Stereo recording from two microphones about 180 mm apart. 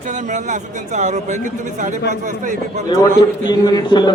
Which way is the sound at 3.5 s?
25° left (ahead or behind).